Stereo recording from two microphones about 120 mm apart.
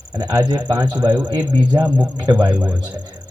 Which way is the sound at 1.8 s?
15° right (ahead or behind).